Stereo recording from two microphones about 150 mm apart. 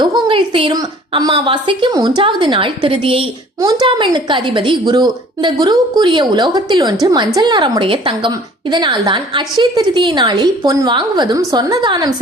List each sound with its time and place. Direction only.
0.0 s a woman's voice: 30° right (ahead or behind)